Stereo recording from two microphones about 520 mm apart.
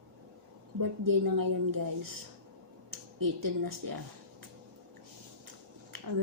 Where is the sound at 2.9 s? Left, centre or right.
Right.